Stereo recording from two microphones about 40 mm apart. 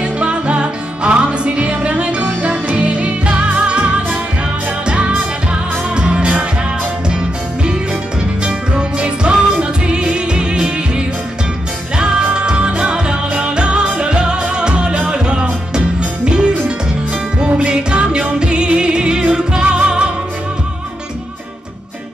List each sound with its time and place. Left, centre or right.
0.0 s music: right
8.9 s music: right
12.4 s music: right
17.6 s music: right